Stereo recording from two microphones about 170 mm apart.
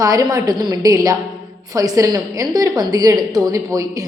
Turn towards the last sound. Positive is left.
turn(degrees=-20)  # may be behind; listen again after turning